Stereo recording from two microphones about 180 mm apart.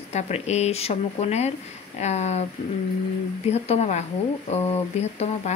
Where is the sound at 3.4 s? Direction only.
35° left (ahead or behind).